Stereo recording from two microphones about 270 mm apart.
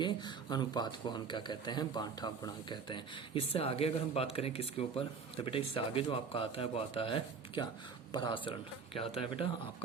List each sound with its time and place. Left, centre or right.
0.0 s speech: centre